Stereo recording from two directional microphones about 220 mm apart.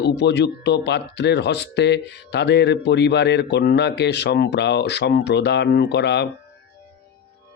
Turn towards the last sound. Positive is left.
turn(degrees=50)  # may be behind; listen again after turning